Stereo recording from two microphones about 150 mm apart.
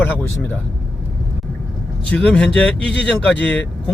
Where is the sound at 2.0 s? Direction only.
10° left (ahead or behind).